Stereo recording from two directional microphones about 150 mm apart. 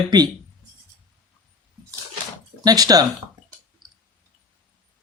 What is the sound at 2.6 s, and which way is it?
Speech, 25° right (ahead or behind).